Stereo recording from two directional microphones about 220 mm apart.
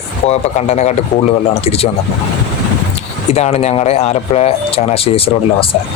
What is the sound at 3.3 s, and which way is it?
Speech, 30° left (ahead or behind).